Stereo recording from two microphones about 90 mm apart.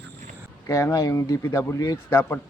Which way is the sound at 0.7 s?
35° left (ahead or behind).